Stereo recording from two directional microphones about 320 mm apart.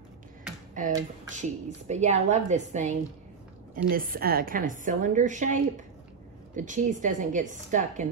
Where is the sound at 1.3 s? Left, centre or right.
Right.